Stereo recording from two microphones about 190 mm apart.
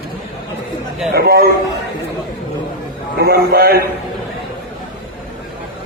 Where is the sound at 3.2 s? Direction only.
55° right (ahead or behind).